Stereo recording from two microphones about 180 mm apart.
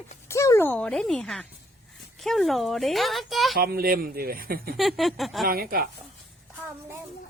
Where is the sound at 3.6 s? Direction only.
55° right (ahead or behind).